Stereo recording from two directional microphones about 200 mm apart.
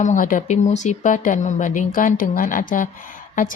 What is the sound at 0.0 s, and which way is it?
A woman's voice, 40° left (ahead or behind).